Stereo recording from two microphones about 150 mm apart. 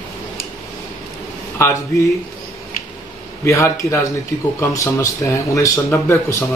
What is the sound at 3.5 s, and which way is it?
Speech, 20° left (ahead or behind).